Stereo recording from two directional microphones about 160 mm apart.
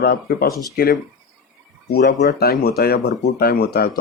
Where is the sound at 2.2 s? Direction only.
75° left (ahead or behind).